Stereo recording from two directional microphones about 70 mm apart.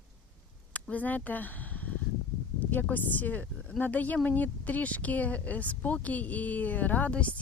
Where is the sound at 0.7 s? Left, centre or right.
Left.